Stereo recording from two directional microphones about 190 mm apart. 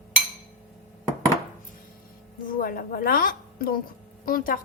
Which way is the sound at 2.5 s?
50° left (ahead or behind).